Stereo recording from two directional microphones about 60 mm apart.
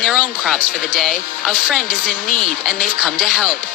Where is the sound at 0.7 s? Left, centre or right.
Centre.